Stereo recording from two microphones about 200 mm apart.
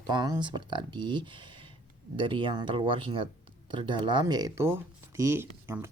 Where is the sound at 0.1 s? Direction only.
20° right (ahead or behind).